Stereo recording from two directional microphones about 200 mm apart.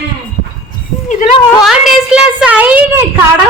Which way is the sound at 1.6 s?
5° right (ahead or behind).